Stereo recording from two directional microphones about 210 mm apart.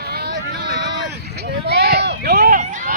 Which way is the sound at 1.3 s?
50° right (ahead or behind).